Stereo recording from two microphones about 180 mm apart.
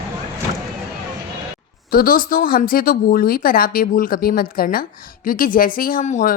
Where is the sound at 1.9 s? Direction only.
55° left (ahead or behind).